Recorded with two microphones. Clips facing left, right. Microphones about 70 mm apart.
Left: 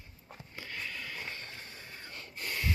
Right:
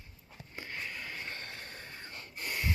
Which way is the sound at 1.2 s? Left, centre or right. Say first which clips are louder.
Right 1 dB; right.